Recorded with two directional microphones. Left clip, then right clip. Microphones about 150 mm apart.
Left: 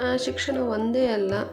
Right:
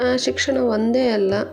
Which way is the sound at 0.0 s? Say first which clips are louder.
Right 6 dB; 30° right (ahead or behind).